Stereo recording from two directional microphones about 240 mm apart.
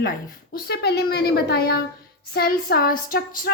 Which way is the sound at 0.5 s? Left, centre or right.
Left.